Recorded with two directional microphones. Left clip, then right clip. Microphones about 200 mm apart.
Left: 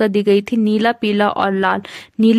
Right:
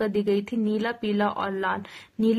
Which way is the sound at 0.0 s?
50° left (ahead or behind).